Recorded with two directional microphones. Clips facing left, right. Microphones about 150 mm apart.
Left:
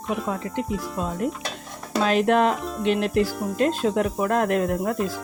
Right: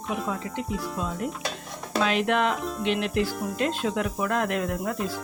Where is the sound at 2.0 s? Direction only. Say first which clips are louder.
Left 5 dB; 40° left (ahead or behind).